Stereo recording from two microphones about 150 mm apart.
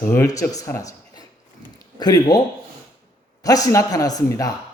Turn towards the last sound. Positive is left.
turn(degrees=25)  # may be behind; listen again after turning